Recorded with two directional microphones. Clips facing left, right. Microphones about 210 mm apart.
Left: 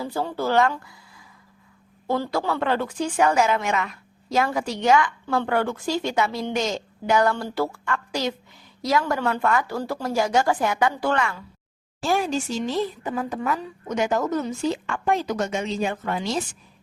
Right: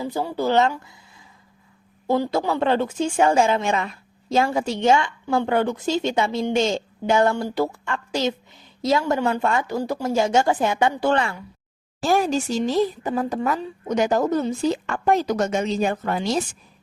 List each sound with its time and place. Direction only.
0.0 s speech: 15° right (ahead or behind)
2.0 s a woman's voice: 20° right (ahead or behind)
12.0 s speech: 40° right (ahead or behind)